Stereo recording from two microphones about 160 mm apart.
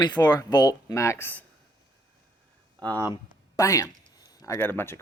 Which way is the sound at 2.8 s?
10° left (ahead or behind).